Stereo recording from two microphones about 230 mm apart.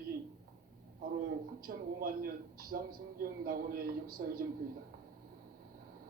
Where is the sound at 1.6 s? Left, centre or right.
Right.